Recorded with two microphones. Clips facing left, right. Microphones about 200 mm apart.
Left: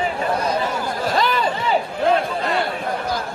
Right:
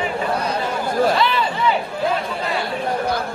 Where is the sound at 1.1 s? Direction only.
40° left (ahead or behind).